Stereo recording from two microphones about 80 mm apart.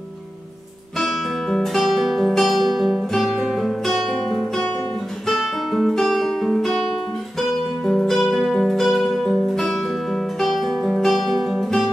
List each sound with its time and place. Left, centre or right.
0.9 s music: centre